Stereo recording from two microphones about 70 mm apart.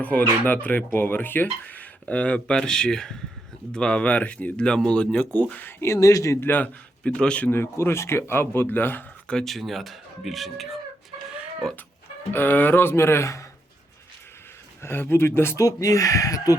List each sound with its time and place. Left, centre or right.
0.0 s speech: left
5.8 s speech: left
6.4 s speech: left
7.0 s speech: centre
7.5 s a man's voice: left
9.2 s speech: centre
12.3 s a man's voice: left
14.8 s a man's voice: left
15.5 s speech: left